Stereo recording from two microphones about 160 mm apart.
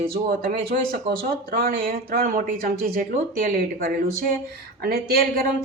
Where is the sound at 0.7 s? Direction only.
65° right (ahead or behind).